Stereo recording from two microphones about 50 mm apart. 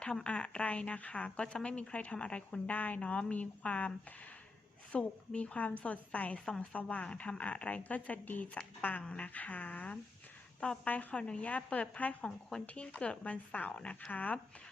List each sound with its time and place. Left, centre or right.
0.3 s a woman's voice: left
2.7 s a woman's voice: left
6.4 s speech: centre
6.7 s a woman's voice: left
12.2 s speech: centre
12.6 s a woman's voice: left